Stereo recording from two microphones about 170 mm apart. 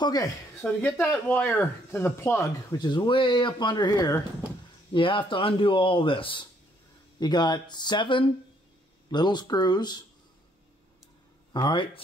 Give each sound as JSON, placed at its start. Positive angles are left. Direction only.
{"t": 0.0, "sound": "speech", "side_deg": 20}
{"t": 0.6, "sound": "speech", "side_deg": 10}
{"t": 2.8, "sound": "speech", "side_deg": 25}
{"t": 11.5, "sound": "speech", "side_deg": 25}